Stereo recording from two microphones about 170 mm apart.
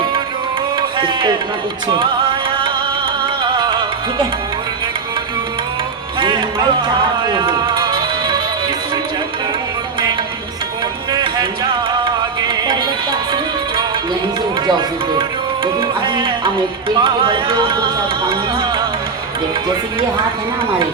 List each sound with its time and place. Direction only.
0.8 s music: 30° right (ahead or behind)
3.4 s music: 25° right (ahead or behind)
6.1 s music: 30° right (ahead or behind)
11.1 s music: 25° right (ahead or behind)
15.6 s music: 30° right (ahead or behind)
17.0 s speech: 30° right (ahead or behind)